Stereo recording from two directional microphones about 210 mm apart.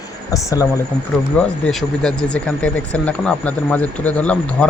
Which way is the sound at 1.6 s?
5° left (ahead or behind).